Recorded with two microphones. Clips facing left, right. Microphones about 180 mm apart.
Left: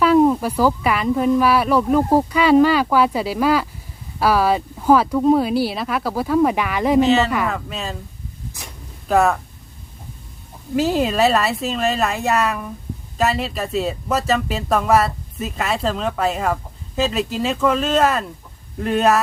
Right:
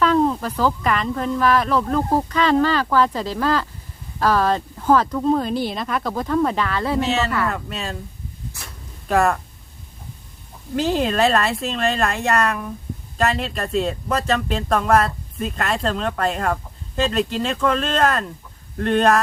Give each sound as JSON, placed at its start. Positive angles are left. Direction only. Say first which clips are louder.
{"t": 0.0, "sound": "speech", "louder": "left 4 dB", "side_deg": 10}
{"t": 7.0, "sound": "speech", "louder": "left 7 dB", "side_deg": 0}
{"t": 7.3, "sound": "speech", "louder": "left 1 dB", "side_deg": 15}
{"t": 7.5, "sound": "speech", "louder": "left 1 dB", "side_deg": 0}
{"t": 9.0, "sound": "speech", "louder": "left 2 dB", "side_deg": 0}
{"t": 10.8, "sound": "speech", "louder": "left 2 dB", "side_deg": 5}